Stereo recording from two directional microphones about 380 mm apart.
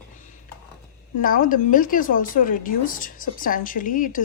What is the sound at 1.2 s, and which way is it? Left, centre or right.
A woman's voice, left.